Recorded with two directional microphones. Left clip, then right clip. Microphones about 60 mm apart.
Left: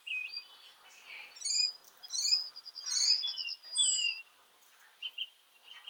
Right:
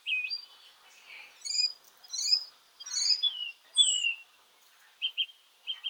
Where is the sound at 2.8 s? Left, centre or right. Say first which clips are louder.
Right 2 dB; centre.